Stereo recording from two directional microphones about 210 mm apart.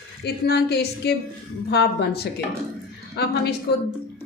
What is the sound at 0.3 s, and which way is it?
A woman's voice, 50° left (ahead or behind).